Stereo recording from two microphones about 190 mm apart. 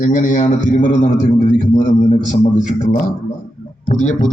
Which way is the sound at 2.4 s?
40° left (ahead or behind).